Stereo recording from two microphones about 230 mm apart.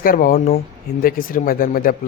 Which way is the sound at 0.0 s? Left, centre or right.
Left.